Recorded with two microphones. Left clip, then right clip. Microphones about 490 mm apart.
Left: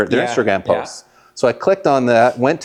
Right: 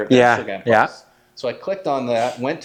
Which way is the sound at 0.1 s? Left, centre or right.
Right.